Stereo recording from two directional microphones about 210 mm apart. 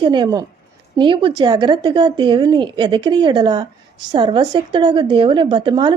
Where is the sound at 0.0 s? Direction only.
20° right (ahead or behind).